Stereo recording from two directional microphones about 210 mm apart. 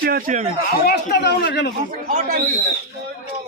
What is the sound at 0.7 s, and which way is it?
Speech, 50° left (ahead or behind).